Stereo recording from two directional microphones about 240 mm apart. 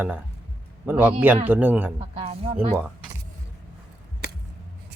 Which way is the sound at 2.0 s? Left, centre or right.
Right.